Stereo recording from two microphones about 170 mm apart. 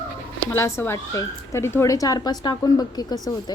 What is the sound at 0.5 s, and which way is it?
Speech, 15° left (ahead or behind).